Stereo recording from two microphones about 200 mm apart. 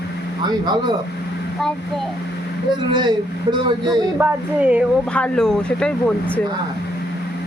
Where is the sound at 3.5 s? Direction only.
20° right (ahead or behind).